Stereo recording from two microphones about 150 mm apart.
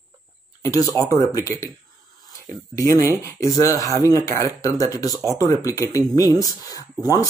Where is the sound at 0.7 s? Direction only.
20° left (ahead or behind).